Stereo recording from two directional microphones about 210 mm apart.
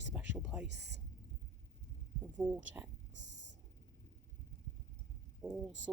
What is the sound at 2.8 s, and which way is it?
Speech, 10° right (ahead or behind).